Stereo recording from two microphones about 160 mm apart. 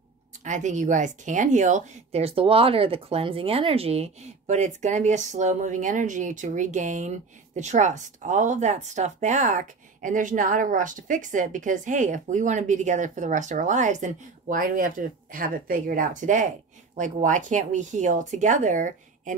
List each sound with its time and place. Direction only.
0.4 s speech: 50° right (ahead or behind)